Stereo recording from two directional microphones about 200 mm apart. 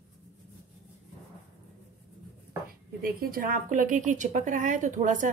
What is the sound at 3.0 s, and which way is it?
A woman's voice, 45° right (ahead or behind).